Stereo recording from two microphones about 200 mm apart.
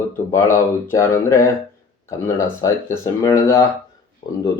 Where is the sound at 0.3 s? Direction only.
15° left (ahead or behind).